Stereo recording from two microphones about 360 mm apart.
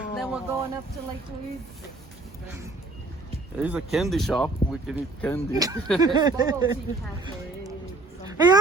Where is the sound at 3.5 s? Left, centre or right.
Centre.